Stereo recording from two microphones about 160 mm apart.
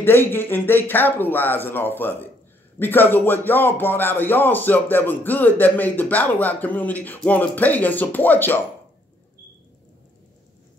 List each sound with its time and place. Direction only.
0.0 s speech: 15° left (ahead or behind)